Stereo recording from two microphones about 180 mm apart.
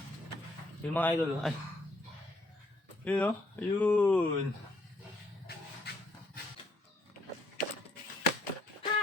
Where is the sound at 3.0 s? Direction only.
10° left (ahead or behind).